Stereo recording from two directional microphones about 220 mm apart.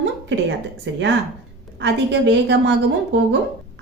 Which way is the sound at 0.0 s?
55° right (ahead or behind).